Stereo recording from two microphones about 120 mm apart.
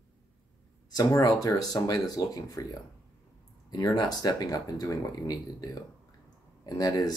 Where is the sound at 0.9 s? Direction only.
30° left (ahead or behind).